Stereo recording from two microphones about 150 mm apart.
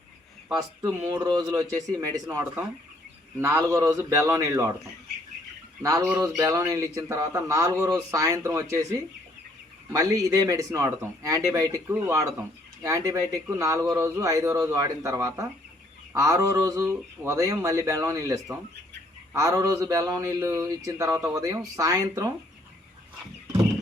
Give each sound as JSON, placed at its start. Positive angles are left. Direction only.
{"t": 0.5, "sound": "speech", "side_deg": -25}
{"t": 5.8, "sound": "speech", "side_deg": -20}